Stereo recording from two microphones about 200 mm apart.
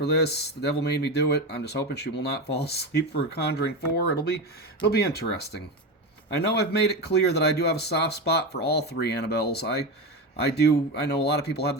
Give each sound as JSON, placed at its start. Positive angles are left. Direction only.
{"t": 0.0, "sound": "speech", "side_deg": 55}